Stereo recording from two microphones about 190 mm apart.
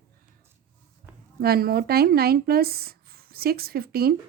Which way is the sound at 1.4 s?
55° right (ahead or behind).